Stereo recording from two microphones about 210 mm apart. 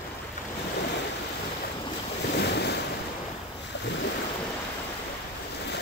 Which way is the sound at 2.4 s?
50° left (ahead or behind).